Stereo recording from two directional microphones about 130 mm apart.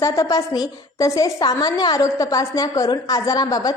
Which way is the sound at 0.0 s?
25° left (ahead or behind).